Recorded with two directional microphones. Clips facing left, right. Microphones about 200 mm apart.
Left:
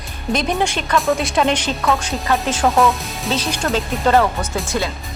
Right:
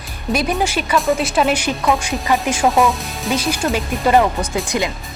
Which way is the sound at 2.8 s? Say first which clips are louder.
Even; centre (ahead or behind).